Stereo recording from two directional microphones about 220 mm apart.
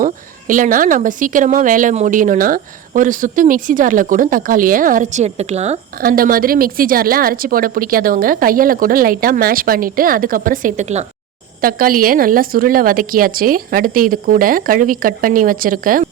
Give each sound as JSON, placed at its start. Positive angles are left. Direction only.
{"t": 0.0, "sound": "a woman's voice", "side_deg": -35}